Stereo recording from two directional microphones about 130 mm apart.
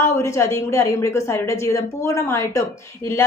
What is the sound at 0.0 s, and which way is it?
A woman's voice, 20° left (ahead or behind).